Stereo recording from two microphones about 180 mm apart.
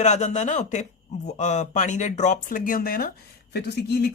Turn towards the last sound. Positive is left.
turn(degrees=60)  # may be behind; listen again after turning